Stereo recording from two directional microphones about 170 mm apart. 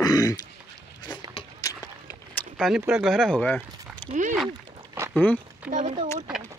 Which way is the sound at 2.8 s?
Centre (ahead or behind).